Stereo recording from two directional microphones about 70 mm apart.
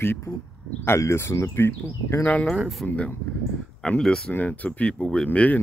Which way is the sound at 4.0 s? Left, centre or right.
Centre.